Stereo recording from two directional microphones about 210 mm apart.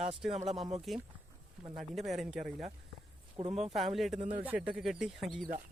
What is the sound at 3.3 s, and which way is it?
Speech, 30° right (ahead or behind).